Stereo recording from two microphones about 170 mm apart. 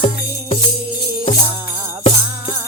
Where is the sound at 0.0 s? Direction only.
35° left (ahead or behind).